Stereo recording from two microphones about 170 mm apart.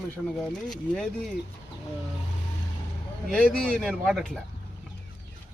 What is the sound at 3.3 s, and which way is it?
Speech, 5° left (ahead or behind).